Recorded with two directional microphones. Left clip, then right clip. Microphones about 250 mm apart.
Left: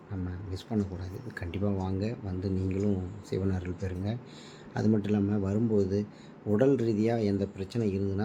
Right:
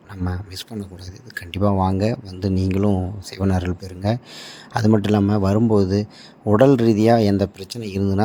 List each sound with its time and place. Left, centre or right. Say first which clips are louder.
0.7 s speech: left 3 dB; centre
1.3 s speech: right 12 dB; right